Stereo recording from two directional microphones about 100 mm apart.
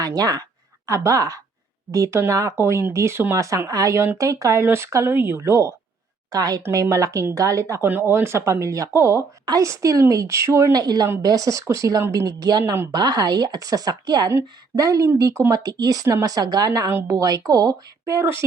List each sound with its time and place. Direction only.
0.0 s speech: 40° right (ahead or behind)
7.9 s speech: 20° right (ahead or behind)
12.4 s speech: 45° right (ahead or behind)
12.6 s speech: 25° right (ahead or behind)
12.9 s speech: 45° right (ahead or behind)